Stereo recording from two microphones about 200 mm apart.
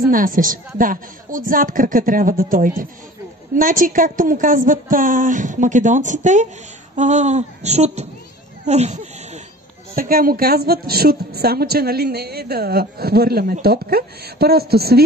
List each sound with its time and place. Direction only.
0.1 s a woman's voice: 45° right (ahead or behind)
8.6 s a sound: 35° right (ahead or behind)
9.9 s a woman's voice: 45° right (ahead or behind)